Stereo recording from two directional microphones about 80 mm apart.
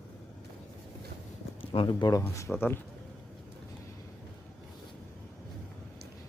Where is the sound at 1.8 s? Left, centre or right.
Left.